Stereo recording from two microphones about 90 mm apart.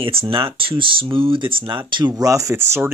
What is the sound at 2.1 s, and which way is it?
Speech, 40° right (ahead or behind).